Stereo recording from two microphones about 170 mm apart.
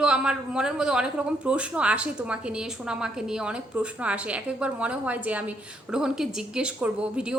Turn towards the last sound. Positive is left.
turn(degrees=-5)  # may be behind; listen again after turning